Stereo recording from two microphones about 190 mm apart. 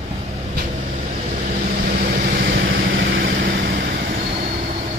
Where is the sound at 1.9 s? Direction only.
50° right (ahead or behind).